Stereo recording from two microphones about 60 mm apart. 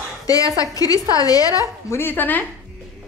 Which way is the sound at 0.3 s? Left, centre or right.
Left.